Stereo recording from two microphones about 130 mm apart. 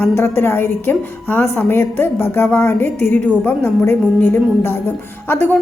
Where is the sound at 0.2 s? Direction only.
20° left (ahead or behind).